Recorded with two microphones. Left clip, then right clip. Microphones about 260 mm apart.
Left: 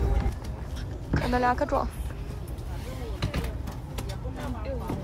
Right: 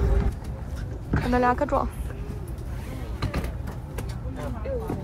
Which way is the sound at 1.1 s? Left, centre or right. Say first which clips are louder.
Right 2 dB; centre.